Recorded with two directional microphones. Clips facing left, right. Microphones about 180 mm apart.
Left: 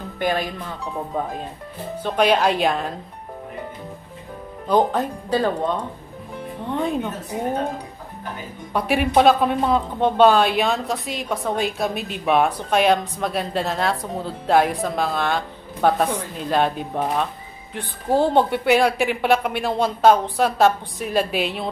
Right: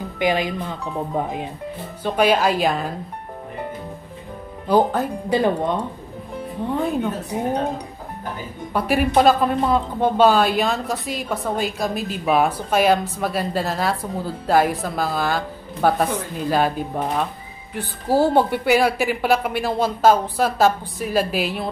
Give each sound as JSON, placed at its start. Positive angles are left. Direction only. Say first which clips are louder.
{"t": 0.2, "sound": "speech", "louder": "right 2 dB", "side_deg": -15}
{"t": 2.0, "sound": "a woman's voice", "louder": "right 1 dB", "side_deg": -5}
{"t": 4.6, "sound": "speech", "louder": "right 1 dB", "side_deg": -5}
{"t": 6.7, "sound": "a woman's voice", "louder": "right 1 dB", "side_deg": 0}
{"t": 8.7, "sound": "a woman's voice", "louder": "even", "side_deg": 0}